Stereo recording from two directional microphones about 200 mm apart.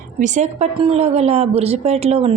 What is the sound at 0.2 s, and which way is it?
A woman's voice, 35° right (ahead or behind).